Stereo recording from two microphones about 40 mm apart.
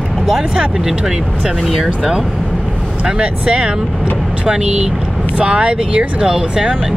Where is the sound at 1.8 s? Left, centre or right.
Centre.